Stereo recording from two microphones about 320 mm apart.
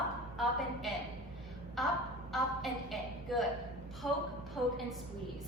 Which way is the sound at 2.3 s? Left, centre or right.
Centre.